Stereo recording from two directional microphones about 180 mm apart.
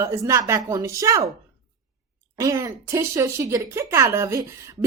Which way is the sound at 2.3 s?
20° right (ahead or behind).